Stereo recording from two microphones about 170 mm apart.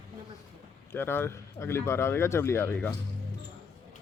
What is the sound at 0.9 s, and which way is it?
Speech, 15° left (ahead or behind).